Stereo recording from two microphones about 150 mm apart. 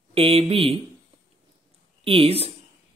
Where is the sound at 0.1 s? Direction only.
40° right (ahead or behind).